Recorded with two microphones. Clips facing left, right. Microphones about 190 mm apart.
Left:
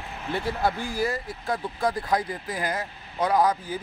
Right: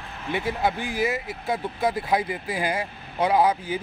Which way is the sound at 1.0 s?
5° right (ahead or behind).